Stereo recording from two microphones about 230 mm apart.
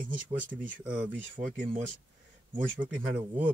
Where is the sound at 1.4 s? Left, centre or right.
Right.